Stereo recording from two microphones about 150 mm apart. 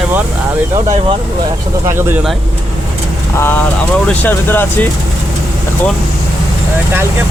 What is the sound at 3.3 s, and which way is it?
Speech, 15° left (ahead or behind).